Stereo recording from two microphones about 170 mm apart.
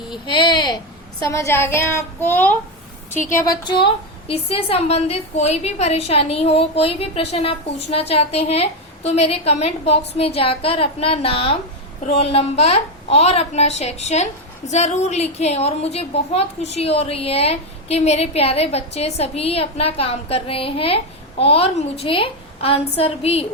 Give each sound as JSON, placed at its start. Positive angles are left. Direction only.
{"t": 0.3, "sound": "speech", "side_deg": 25}
{"t": 1.2, "sound": "child singing", "side_deg": 20}
{"t": 3.3, "sound": "a woman's voice", "side_deg": 20}